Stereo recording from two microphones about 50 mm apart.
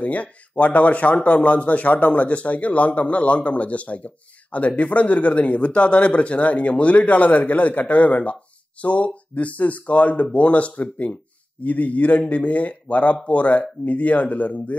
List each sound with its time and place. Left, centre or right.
0.0 s a man's voice: left